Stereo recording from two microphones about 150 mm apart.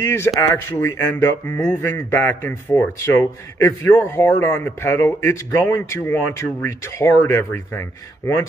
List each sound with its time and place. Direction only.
0.0 s speech: 15° left (ahead or behind)